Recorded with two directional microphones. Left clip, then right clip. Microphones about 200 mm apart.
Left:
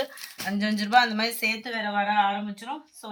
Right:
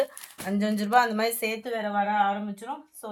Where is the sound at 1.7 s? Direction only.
45° right (ahead or behind).